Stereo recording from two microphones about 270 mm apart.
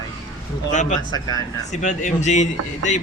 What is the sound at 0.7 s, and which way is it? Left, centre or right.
Speech, left.